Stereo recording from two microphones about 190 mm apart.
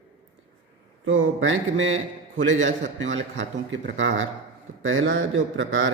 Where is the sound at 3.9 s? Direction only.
75° right (ahead or behind).